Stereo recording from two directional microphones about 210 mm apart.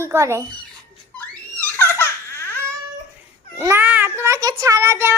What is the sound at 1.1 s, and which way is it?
Baby laughter, 10° left (ahead or behind).